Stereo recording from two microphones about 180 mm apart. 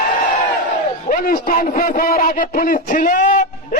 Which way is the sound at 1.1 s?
50° left (ahead or behind).